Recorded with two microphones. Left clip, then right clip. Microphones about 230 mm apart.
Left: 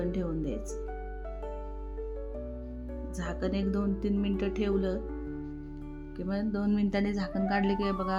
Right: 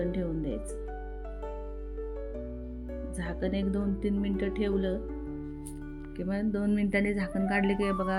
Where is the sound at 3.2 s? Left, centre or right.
Centre.